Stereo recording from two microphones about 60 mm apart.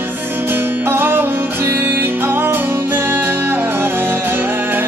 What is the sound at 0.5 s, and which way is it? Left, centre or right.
Music, right.